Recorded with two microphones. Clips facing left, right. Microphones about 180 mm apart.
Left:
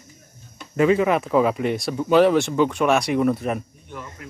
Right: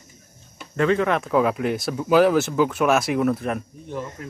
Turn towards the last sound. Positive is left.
turn(degrees=-35)  # may be behind; listen again after turning